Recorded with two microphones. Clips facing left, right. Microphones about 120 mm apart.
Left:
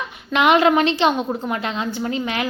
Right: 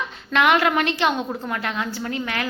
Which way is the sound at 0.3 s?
20° left (ahead or behind).